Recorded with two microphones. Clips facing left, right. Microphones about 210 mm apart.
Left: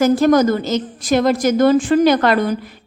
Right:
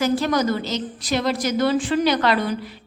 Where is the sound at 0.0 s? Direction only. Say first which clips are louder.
Left 8 dB; 50° left (ahead or behind).